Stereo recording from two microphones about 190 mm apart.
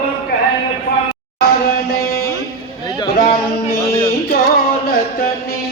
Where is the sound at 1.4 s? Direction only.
55° left (ahead or behind).